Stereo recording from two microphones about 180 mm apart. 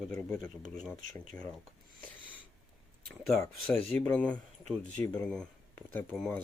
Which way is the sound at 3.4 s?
10° left (ahead or behind).